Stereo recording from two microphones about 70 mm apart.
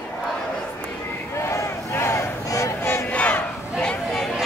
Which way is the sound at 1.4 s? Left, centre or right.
Left.